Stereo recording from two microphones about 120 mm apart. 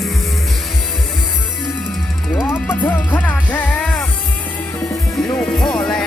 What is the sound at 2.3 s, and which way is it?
Music, 20° left (ahead or behind).